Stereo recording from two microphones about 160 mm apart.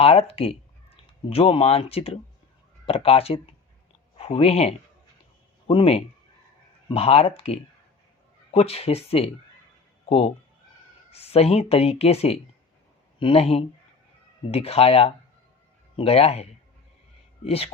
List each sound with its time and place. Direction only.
0.0 s speech: 40° left (ahead or behind)